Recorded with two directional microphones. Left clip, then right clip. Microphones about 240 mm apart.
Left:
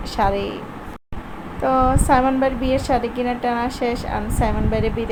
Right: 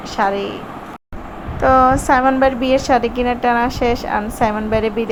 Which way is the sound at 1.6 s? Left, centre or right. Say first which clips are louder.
Right 6 dB; centre.